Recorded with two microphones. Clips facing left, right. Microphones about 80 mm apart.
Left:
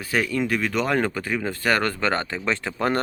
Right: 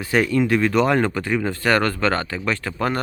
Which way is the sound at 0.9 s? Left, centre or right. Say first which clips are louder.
Right 4 dB; centre.